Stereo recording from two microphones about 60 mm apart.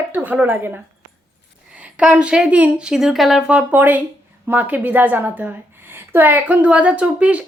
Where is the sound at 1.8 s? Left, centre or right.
Right.